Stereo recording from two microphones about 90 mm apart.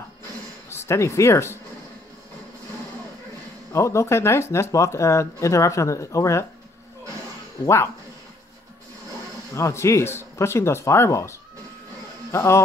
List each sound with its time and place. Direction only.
0.7 s speech: 30° left (ahead or behind)
3.7 s speech: 35° left (ahead or behind)
7.6 s speech: 30° left (ahead or behind)
9.5 s speech: 35° left (ahead or behind)